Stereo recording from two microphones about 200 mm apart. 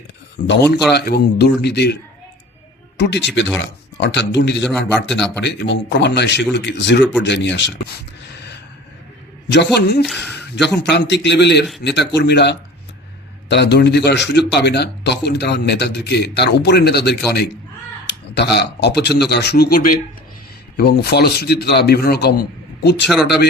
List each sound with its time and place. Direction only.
0.4 s speech: 60° left (ahead or behind)
3.0 s speech: 60° left (ahead or behind)
9.5 s speech: 60° left (ahead or behind)
10.1 s speech: centre (ahead or behind)
10.8 s speech: 60° left (ahead or behind)
18.5 s a man's voice: 55° left (ahead or behind)